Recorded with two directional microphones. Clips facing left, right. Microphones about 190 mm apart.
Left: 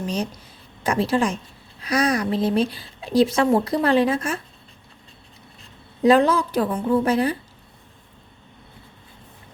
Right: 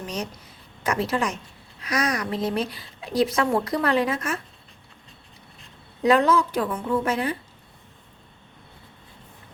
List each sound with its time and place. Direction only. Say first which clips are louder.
0.9 s a woman's voice: left 4 dB; 30° left (ahead or behind)
6.0 s a woman's voice: left 3 dB; 30° left (ahead or behind)